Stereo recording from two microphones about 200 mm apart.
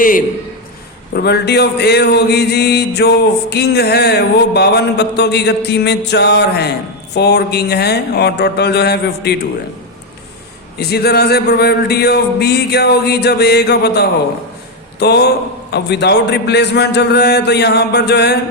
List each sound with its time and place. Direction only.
1.1 s speech: 55° left (ahead or behind)
10.8 s a man's voice: 55° left (ahead or behind)